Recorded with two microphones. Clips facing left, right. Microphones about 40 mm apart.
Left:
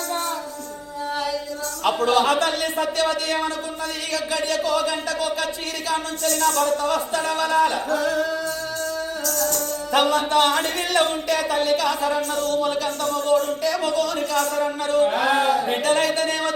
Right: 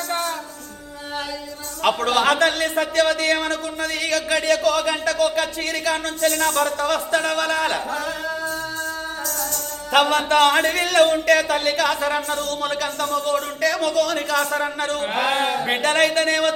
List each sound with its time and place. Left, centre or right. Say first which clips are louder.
1.8 s speech: right 1 dB; right
2.4 s a man's voice: right 3 dB; right
4.1 s a man's voice: right 4 dB; right
6.2 s a man's voice: right 1 dB; right
9.9 s a man's voice: right 2 dB; right
13.3 s a sound: left 1 dB; right
15.0 s a sound: left 2 dB; right
15.6 s music: right 1 dB; right